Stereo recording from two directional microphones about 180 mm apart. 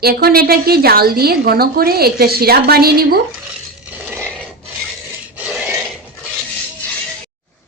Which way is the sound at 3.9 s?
10° right (ahead or behind).